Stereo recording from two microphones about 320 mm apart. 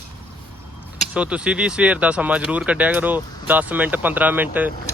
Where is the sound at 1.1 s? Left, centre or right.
Centre.